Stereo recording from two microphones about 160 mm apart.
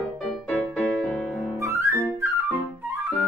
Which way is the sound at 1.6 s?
20° right (ahead or behind).